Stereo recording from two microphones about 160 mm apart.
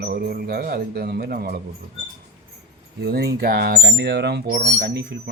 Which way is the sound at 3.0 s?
90° right.